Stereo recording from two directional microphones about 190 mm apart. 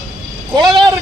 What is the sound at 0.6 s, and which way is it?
Speech, 20° right (ahead or behind).